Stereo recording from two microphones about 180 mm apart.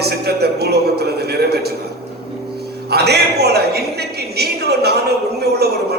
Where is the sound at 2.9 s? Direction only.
65° right (ahead or behind).